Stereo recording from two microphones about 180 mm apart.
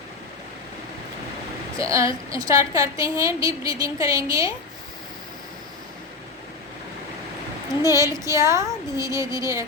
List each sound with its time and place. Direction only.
1.8 s a woman's voice: 15° right (ahead or behind)
7.8 s a woman's voice: 15° right (ahead or behind)